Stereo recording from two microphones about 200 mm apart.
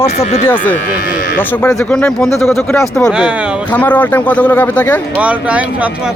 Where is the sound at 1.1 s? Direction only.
45° left (ahead or behind).